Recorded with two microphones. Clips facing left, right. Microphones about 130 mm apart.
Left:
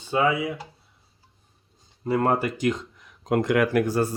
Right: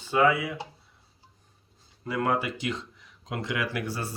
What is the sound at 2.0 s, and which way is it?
Speech, 40° left (ahead or behind).